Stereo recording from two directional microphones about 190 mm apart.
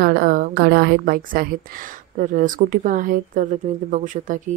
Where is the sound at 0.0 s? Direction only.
50° right (ahead or behind).